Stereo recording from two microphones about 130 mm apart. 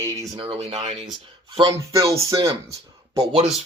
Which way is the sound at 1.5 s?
35° right (ahead or behind).